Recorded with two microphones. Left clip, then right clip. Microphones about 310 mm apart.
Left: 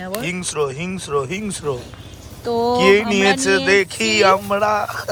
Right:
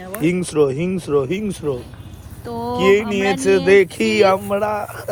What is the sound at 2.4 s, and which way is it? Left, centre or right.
Speech, left.